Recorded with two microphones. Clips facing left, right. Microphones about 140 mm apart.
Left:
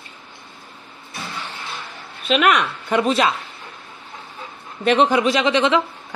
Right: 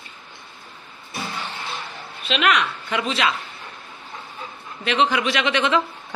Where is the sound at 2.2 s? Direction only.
45° left (ahead or behind).